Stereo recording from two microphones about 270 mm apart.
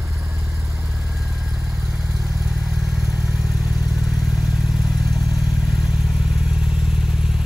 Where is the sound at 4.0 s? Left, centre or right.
Centre.